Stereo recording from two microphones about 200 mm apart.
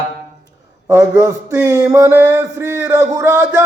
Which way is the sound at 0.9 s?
15° right (ahead or behind).